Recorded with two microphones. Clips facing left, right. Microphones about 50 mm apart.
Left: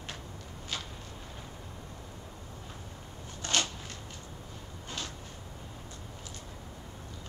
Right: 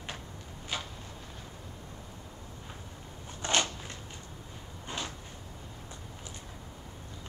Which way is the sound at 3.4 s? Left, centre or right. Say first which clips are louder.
Right 2 dB; right.